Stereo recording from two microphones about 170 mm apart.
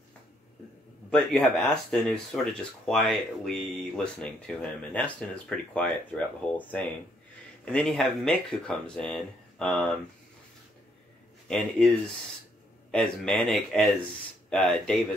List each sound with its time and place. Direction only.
1.1 s speech: 5° left (ahead or behind)
11.4 s speech: 5° left (ahead or behind)
12.9 s speech: 5° left (ahead or behind)